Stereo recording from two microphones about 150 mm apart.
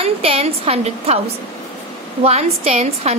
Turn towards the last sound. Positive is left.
turn(degrees=-40)  # may be behind; listen again after turning